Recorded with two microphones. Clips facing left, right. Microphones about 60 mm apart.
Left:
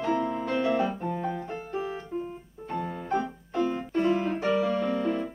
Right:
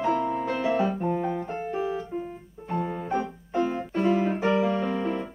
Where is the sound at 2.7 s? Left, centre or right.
Centre.